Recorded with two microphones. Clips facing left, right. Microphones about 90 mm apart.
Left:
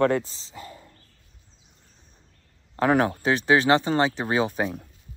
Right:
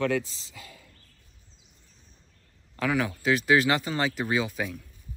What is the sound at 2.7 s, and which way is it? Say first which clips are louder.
Speech: left 6 dB; 40° left (ahead or behind).